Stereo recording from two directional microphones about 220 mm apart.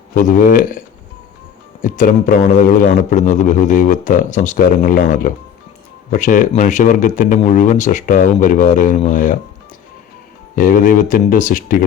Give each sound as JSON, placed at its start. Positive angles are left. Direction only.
{"t": 0.2, "sound": "a man's voice", "side_deg": 35}
{"t": 1.8, "sound": "a man's voice", "side_deg": 35}
{"t": 10.5, "sound": "a man's voice", "side_deg": 40}